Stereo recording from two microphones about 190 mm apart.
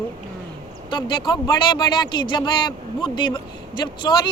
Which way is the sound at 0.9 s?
25° left (ahead or behind).